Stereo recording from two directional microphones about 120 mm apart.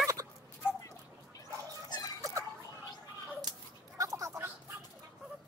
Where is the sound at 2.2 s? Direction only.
25° right (ahead or behind).